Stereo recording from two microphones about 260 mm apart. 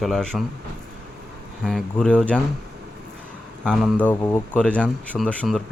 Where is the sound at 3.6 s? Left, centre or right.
Centre.